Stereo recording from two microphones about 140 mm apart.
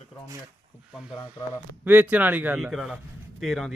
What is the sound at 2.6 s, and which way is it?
A man's voice, centre (ahead or behind).